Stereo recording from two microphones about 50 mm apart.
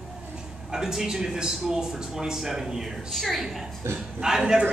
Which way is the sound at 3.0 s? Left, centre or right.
Centre.